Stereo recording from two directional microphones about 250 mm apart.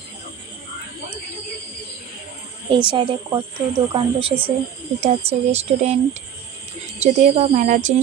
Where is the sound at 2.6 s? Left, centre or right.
Centre.